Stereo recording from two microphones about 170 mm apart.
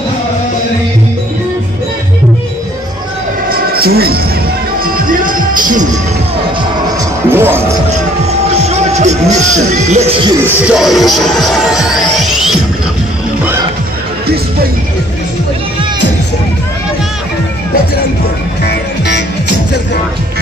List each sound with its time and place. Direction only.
3.4 s a sound: 60° right (ahead or behind)
4.8 s music: 55° right (ahead or behind)
7.2 s speech: 15° right (ahead or behind)
8.5 s speech: 40° right (ahead or behind)
10.6 s speech: 5° right (ahead or behind)
14.2 s music: 65° right (ahead or behind)
18.6 s music: 80° left